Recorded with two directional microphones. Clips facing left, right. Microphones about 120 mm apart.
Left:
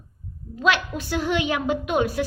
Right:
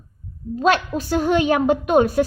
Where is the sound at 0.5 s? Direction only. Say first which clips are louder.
Right 4 dB; 40° right (ahead or behind).